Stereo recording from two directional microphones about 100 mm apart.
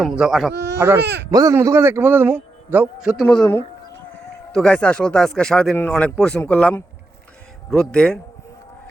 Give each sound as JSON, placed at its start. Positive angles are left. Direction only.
{"t": 0.0, "sound": "speech", "side_deg": 0}
{"t": 0.8, "sound": "a man's voice", "side_deg": -25}
{"t": 1.3, "sound": "a man's voice", "side_deg": -35}
{"t": 1.5, "sound": "a man's voice", "side_deg": -25}
{"t": 3.0, "sound": "a man's voice", "side_deg": -5}
{"t": 3.2, "sound": "speech", "side_deg": 10}
{"t": 4.5, "sound": "speech", "side_deg": 10}